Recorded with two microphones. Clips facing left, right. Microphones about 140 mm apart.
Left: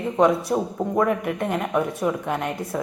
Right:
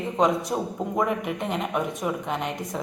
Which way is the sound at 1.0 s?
Centre (ahead or behind).